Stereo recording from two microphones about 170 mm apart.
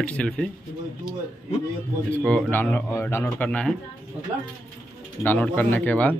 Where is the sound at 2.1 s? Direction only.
5° left (ahead or behind).